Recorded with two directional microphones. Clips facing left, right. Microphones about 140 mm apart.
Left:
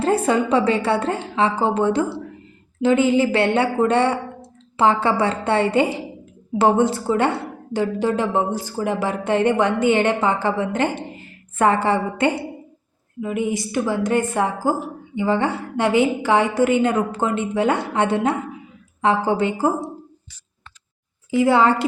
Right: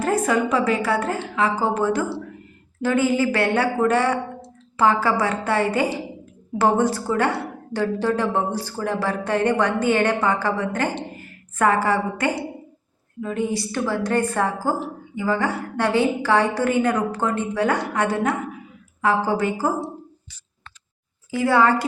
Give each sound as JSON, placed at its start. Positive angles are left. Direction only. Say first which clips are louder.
{"t": 0.0, "sound": "a woman's voice", "louder": "left 2 dB", "side_deg": 30}
{"t": 15.1, "sound": "a woman's voice", "louder": "left 3 dB", "side_deg": 25}
{"t": 21.2, "sound": "a woman's voice", "louder": "left 2 dB", "side_deg": 20}